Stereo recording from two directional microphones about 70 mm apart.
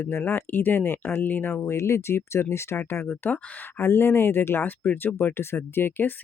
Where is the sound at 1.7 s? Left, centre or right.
Left.